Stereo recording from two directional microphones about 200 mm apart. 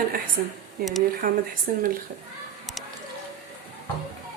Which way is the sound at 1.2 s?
45° right (ahead or behind).